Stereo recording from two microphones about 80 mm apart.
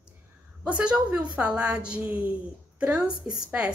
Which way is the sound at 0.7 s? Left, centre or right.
Centre.